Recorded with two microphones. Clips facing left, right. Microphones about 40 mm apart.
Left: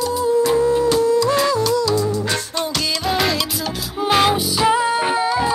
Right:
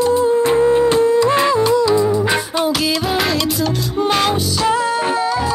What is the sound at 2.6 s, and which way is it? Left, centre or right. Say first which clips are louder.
Music: right 5 dB; centre.